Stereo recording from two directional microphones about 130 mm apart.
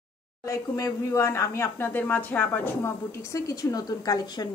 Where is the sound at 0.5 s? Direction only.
25° left (ahead or behind).